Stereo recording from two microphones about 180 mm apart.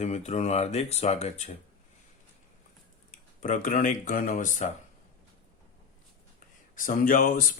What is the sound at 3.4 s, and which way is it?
Speech, 45° left (ahead or behind).